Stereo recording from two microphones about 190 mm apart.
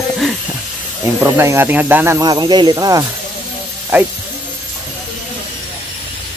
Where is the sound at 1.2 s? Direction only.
15° right (ahead or behind).